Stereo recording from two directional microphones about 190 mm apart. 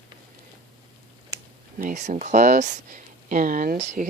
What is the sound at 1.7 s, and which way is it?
Speech, 40° right (ahead or behind).